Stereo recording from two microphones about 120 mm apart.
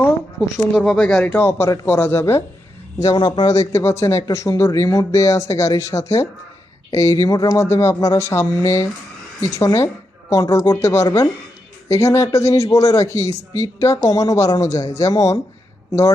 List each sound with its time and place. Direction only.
0.3 s speech: centre (ahead or behind); by 2.4 s 20° left (ahead or behind)
3.2 s a man's voice: 40° left (ahead or behind)